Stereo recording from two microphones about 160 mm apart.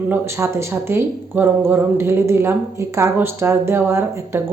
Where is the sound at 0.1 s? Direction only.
15° right (ahead or behind).